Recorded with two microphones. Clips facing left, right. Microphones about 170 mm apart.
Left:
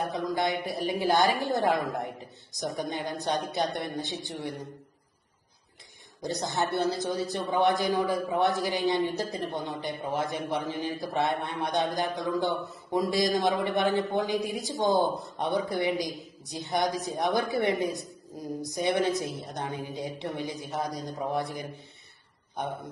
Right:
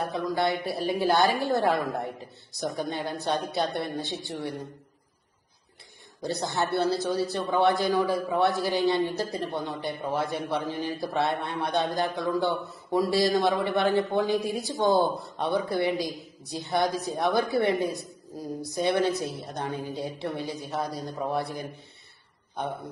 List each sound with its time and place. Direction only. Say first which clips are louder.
0.0 s a man's voice: right 2 dB; 20° left (ahead or behind)
6.5 s a man's voice: right 2 dB; 15° left (ahead or behind)